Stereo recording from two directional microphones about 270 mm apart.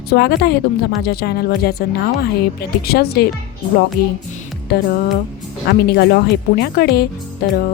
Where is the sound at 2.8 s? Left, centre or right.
Left.